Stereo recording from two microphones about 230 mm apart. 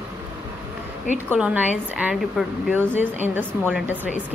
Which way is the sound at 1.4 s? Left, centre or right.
Centre.